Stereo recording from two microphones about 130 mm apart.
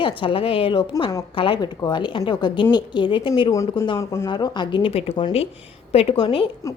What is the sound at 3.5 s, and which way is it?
Speech, 25° left (ahead or behind).